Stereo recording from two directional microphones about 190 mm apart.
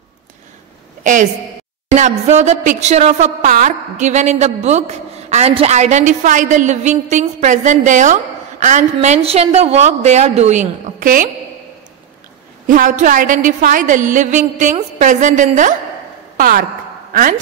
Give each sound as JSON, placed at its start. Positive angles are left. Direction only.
{"t": 1.0, "sound": "a woman's voice", "side_deg": -40}
{"t": 12.6, "sound": "a woman's voice", "side_deg": -45}